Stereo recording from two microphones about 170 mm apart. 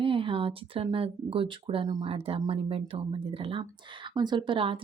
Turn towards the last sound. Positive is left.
turn(degrees=-30)  # may be behind; listen again after turning